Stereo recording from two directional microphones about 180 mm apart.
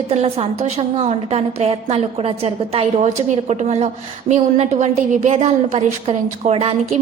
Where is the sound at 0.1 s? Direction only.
35° right (ahead or behind).